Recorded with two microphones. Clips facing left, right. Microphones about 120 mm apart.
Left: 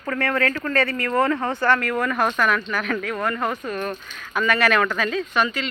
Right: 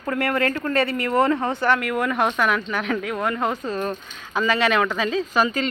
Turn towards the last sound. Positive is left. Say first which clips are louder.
# right 1 dB
turn(degrees=-30)  # may be behind; listen again after turning